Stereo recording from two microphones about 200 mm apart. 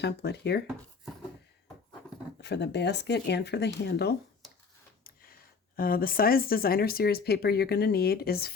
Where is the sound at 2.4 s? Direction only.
60° left (ahead or behind).